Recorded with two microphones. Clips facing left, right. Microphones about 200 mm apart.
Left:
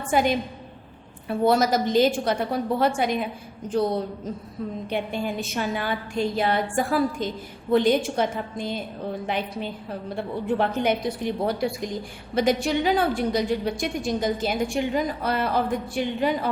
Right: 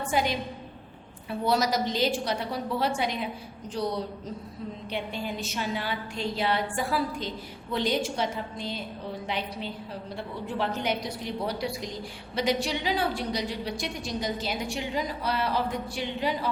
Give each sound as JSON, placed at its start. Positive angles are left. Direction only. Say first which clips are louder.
{"t": 0.1, "sound": "a woman's voice", "louder": "left 7 dB", "side_deg": 50}